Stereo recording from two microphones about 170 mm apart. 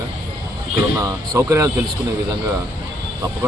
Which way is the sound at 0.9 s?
15° right (ahead or behind).